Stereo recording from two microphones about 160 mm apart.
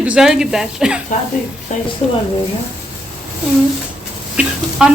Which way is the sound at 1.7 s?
50° left (ahead or behind).